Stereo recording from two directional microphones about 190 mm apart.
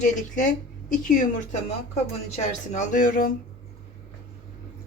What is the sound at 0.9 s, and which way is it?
Speech, 45° left (ahead or behind).